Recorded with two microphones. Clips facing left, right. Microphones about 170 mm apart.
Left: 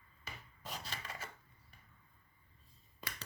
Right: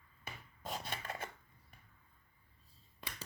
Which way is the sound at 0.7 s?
55° right (ahead or behind).